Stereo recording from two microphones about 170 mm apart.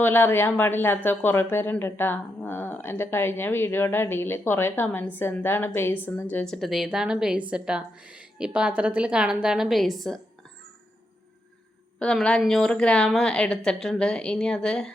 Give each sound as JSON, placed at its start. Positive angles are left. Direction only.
{"t": 0.0, "sound": "a woman's voice", "side_deg": 15}
{"t": 11.9, "sound": "a woman's voice", "side_deg": 5}